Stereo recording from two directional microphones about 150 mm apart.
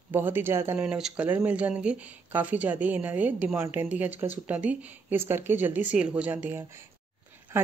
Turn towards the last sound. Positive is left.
turn(degrees=-15)  # may be behind; listen again after turning